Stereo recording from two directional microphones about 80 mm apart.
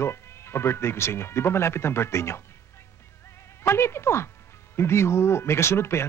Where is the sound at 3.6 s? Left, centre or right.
Left.